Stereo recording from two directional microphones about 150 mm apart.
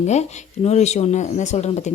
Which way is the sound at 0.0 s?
50° left (ahead or behind).